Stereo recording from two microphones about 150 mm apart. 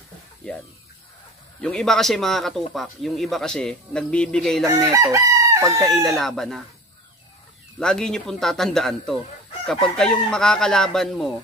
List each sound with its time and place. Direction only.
1.6 s speech: 5° left (ahead or behind)
4.6 s chicken: 20° right (ahead or behind)
5.8 s speech: centre (ahead or behind)
7.8 s speech: 5° left (ahead or behind)